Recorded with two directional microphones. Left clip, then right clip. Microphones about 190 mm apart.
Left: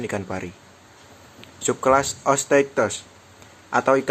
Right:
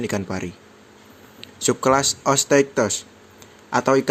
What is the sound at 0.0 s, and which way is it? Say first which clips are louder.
A man's voice: right 2 dB; 45° right (ahead or behind).